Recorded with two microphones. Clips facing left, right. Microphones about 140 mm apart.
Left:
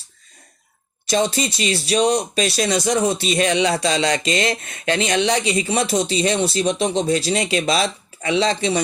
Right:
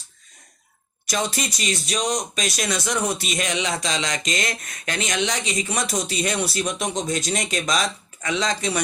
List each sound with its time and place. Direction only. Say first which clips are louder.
1.0 s speech: left 6 dB; 30° left (ahead or behind)